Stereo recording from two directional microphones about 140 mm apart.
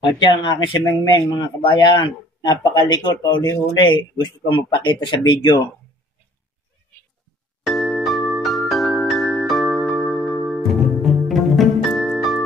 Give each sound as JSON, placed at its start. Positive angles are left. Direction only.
{"t": 0.2, "sound": "speech", "side_deg": 35}
{"t": 3.3, "sound": "speech", "side_deg": 20}
{"t": 3.7, "sound": "speech", "side_deg": 35}
{"t": 7.6, "sound": "music", "side_deg": 0}